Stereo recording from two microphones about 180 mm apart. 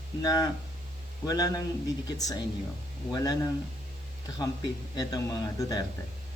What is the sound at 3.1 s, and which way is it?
Speech, 20° left (ahead or behind).